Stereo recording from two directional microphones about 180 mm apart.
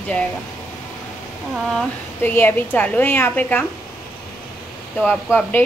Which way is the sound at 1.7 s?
10° left (ahead or behind).